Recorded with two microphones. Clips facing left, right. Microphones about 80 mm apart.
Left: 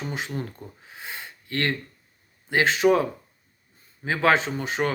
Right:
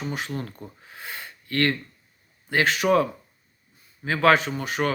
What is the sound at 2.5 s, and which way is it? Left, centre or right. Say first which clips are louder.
Speech: left 1 dB; left.